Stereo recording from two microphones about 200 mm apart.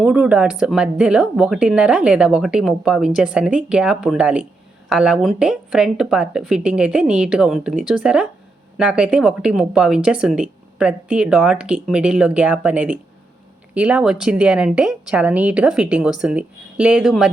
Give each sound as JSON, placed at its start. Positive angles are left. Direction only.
{"t": 0.0, "sound": "speech", "side_deg": -5}